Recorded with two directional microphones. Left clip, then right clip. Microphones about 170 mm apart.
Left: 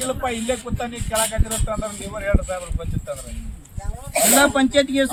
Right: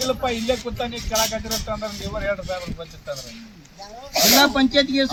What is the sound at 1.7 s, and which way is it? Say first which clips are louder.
Speech: left 1 dB; centre (ahead or behind).